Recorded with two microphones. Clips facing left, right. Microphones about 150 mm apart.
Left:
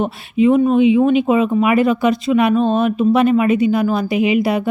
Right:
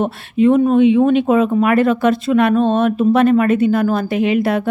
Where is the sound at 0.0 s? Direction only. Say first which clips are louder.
Right 1 dB; centre (ahead or behind).